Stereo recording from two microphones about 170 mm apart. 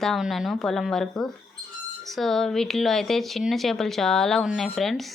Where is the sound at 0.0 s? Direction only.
Centre (ahead or behind).